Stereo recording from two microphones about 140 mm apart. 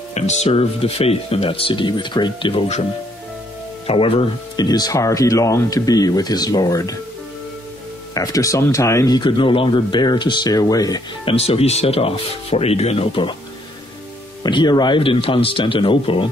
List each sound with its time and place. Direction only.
0.1 s speech: 55° left (ahead or behind); by 2.6 s 35° left (ahead or behind)
3.8 s speech: 40° left (ahead or behind)
4.6 s speech: 30° left (ahead or behind)
8.1 s speech: 25° left (ahead or behind)
11.2 s speech: 45° left (ahead or behind)
14.4 s speech: 30° left (ahead or behind)